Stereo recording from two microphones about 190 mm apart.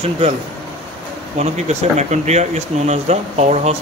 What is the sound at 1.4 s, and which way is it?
Speech, 35° right (ahead or behind).